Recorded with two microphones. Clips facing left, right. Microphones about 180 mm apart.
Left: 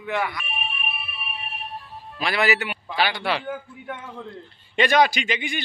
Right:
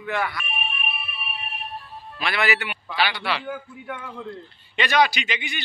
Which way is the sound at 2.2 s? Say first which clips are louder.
Left 2 dB; 35° left (ahead or behind).